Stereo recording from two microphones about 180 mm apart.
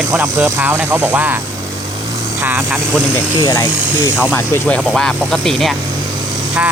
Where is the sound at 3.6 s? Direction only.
10° left (ahead or behind).